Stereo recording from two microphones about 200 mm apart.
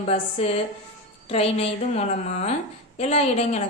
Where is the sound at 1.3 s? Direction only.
30° left (ahead or behind).